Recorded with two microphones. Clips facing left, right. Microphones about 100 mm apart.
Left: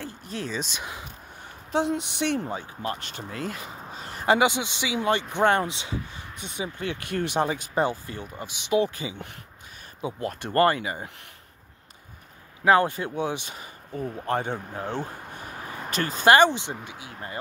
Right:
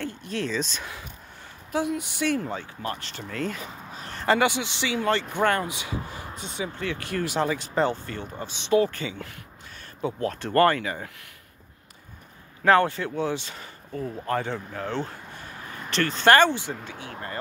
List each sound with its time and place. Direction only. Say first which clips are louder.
0.0 s speech: right 4 dB; 5° left (ahead or behind)
3.3 s speech: right 3 dB; 5° left (ahead or behind)
4.3 s speech: left 1 dB; 15° left (ahead or behind)
12.6 s speech: even; 15° left (ahead or behind)